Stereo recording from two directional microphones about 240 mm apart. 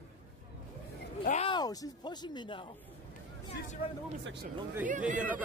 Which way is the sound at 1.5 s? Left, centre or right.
Centre.